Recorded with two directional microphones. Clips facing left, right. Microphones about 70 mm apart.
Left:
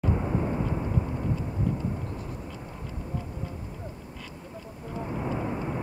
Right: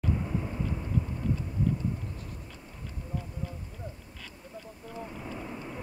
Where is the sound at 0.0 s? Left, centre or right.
Left.